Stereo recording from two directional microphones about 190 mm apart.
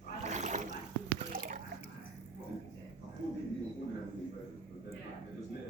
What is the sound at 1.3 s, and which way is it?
Drip, 50° right (ahead or behind).